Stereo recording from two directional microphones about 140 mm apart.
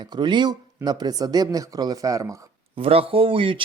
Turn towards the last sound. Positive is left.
turn(degrees=-40)  # may be behind; listen again after turning